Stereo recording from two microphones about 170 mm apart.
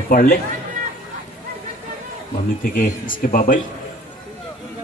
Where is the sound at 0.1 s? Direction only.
60° left (ahead or behind).